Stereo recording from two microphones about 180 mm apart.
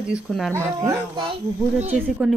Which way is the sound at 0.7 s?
20° right (ahead or behind).